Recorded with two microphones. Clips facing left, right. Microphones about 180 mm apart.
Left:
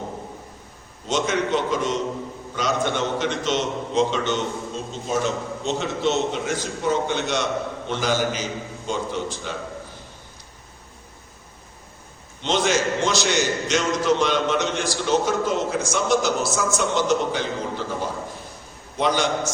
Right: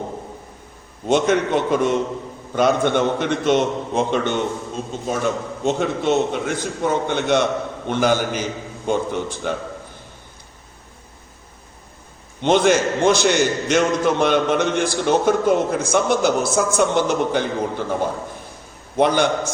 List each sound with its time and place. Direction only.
1.0 s a man's voice: 55° right (ahead or behind)
12.4 s a man's voice: 55° right (ahead or behind)